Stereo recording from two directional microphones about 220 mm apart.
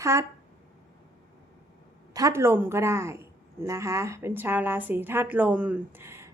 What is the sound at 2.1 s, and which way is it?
A woman's voice, 15° right (ahead or behind).